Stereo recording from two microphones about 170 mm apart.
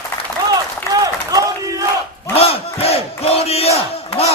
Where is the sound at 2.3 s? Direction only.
35° left (ahead or behind).